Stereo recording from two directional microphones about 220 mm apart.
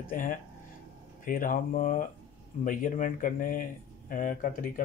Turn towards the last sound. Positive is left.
turn(degrees=35)  # may be behind; listen again after turning